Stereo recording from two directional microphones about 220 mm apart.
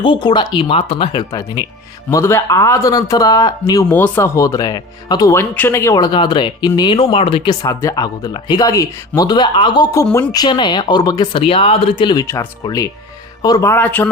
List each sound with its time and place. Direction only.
0.0 s speech: 20° left (ahead or behind)